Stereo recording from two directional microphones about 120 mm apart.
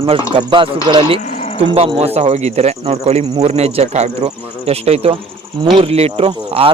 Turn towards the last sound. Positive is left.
turn(degrees=-50)  # may be behind; listen again after turning